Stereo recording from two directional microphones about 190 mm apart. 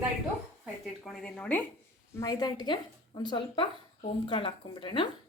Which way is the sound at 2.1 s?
20° left (ahead or behind).